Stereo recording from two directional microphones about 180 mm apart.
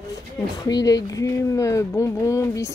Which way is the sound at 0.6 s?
20° left (ahead or behind).